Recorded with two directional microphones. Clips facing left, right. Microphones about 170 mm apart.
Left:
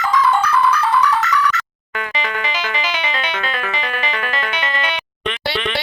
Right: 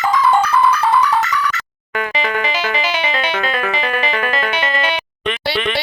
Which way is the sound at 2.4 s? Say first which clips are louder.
Right 4 dB; 35° right (ahead or behind).